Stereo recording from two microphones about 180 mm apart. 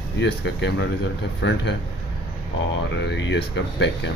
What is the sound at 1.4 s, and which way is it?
Speech, 75° left (ahead or behind).